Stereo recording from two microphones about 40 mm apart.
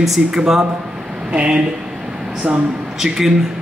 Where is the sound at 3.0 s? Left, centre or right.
Centre.